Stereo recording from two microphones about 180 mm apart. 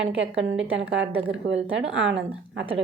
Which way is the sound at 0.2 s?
90° right.